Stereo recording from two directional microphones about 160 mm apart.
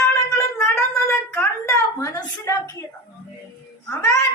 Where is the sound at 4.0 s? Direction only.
20° left (ahead or behind).